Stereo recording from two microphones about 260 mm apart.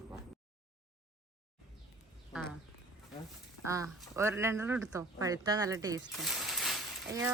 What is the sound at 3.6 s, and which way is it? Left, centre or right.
Speech, centre.